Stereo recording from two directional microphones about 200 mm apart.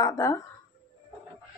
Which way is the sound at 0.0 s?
15° left (ahead or behind).